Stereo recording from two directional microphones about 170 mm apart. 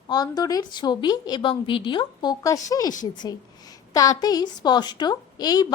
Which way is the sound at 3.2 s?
25° left (ahead or behind).